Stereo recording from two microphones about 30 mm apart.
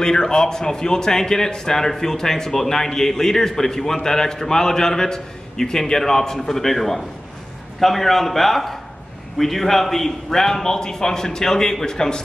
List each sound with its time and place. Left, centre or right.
0.0 s a man's voice: left